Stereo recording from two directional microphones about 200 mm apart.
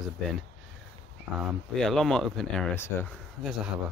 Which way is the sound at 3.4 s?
Centre (ahead or behind).